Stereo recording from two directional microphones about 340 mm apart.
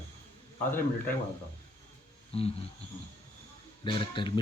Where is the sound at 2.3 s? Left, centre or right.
Centre.